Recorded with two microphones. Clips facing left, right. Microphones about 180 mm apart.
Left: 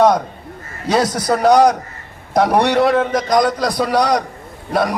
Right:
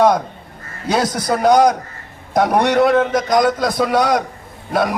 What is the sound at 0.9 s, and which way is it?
A man's voice, centre (ahead or behind).